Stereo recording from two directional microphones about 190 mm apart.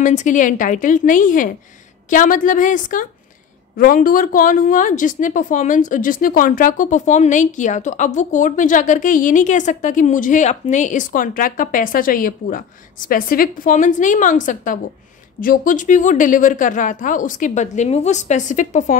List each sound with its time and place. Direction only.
0.0 s a woman's voice: 40° left (ahead or behind)